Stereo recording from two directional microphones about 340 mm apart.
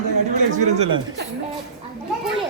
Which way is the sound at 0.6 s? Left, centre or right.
Centre.